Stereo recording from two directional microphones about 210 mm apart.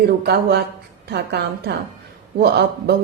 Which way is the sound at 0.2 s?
50° right (ahead or behind).